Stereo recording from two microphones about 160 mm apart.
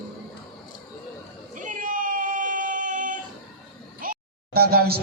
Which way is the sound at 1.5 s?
55° right (ahead or behind).